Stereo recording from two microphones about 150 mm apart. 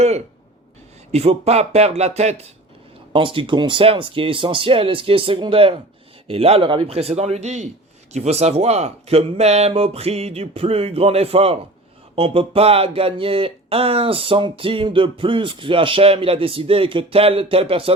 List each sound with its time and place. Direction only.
1.1 s speech: 45° right (ahead or behind)
3.1 s speech: 35° right (ahead or behind)